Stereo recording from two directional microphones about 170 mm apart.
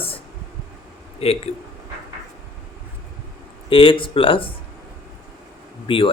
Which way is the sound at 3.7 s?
30° left (ahead or behind).